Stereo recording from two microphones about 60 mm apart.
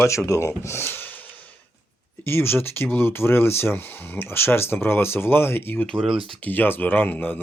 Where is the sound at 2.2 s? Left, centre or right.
Left.